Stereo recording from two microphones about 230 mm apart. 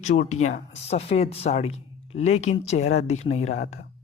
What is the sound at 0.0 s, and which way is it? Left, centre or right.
Speech, left.